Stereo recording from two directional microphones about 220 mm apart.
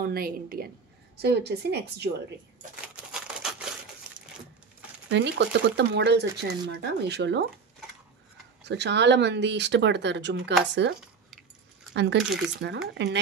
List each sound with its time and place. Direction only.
0.0 s speech: 40° right (ahead or behind)
2.7 s a sound: 5° right (ahead or behind)
5.1 s speech: 50° right (ahead or behind)
8.6 s speech: 50° right (ahead or behind)